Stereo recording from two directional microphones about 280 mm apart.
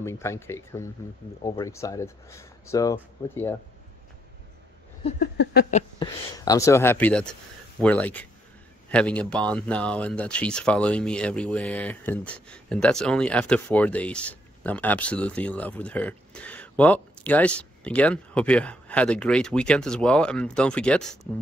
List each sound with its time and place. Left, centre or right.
0.0 s speech: centre
5.2 s a sound: left
6.3 s speech: centre